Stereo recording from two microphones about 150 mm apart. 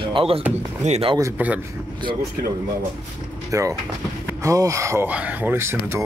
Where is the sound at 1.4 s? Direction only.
10° right (ahead or behind).